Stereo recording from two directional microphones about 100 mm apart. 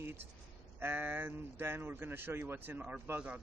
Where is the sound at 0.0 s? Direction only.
20° right (ahead or behind).